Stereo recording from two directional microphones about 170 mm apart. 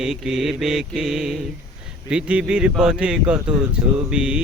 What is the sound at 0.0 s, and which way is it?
Mantra, 5° right (ahead or behind).